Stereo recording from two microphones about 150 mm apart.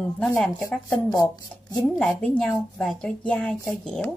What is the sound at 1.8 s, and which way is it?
A woman's voice, 5° left (ahead or behind).